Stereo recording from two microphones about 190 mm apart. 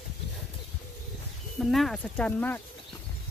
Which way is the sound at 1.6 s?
Centre (ahead or behind).